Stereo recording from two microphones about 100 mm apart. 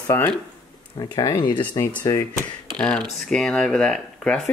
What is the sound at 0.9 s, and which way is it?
Speech, 40° left (ahead or behind).